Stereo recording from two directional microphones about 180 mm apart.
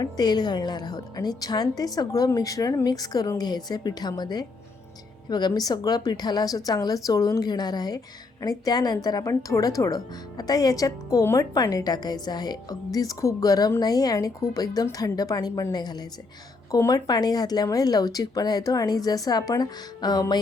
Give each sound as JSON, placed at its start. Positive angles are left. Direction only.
{"t": 0.0, "sound": "speech", "side_deg": 25}